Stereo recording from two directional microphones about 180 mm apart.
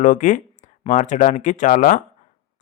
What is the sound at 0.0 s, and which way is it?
Speech, 45° left (ahead or behind).